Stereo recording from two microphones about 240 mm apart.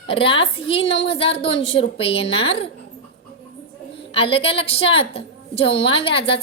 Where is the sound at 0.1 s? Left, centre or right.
Left.